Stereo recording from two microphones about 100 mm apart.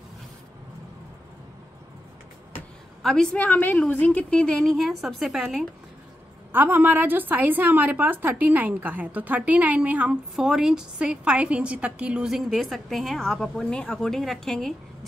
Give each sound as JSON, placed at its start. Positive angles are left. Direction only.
{"t": 3.0, "sound": "a woman's voice", "side_deg": 5}
{"t": 3.4, "sound": "a woman's voice", "side_deg": 15}
{"t": 6.5, "sound": "a woman's voice", "side_deg": -20}